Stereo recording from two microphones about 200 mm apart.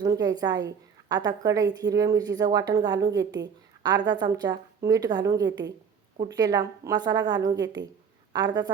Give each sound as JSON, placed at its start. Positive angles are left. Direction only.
{"t": 0.0, "sound": "a woman's voice", "side_deg": -20}